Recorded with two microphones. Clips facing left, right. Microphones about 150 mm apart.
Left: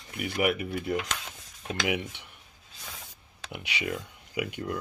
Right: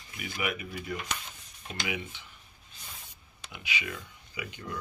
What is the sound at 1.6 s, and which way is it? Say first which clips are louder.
Speech: left 6 dB; 90° left.